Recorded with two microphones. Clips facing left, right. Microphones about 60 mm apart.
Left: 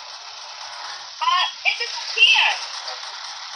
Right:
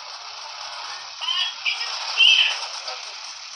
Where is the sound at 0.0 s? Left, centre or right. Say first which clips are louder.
Right 1 dB; right.